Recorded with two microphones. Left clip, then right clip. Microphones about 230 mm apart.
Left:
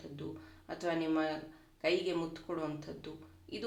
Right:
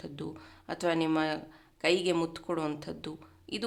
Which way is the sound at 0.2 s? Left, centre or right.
Right.